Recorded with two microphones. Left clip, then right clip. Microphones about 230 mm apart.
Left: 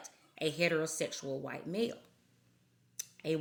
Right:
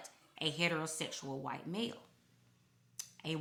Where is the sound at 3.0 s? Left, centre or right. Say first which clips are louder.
Left 6 dB; centre.